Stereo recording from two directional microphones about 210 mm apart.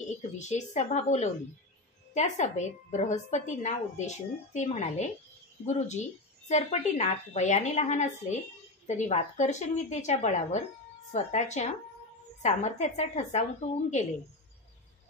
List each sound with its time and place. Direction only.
0.4 s a woman's voice: 35° left (ahead or behind)